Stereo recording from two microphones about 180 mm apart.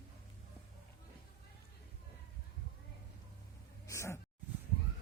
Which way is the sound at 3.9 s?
15° left (ahead or behind).